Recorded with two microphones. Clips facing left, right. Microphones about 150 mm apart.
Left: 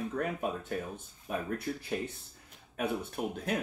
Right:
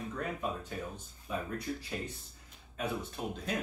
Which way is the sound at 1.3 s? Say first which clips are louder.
Left 2 dB; 60° left (ahead or behind).